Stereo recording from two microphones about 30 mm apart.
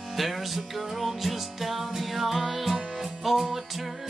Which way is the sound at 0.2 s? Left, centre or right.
Centre.